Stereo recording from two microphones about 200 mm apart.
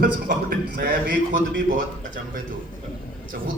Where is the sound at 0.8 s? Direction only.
60° right (ahead or behind).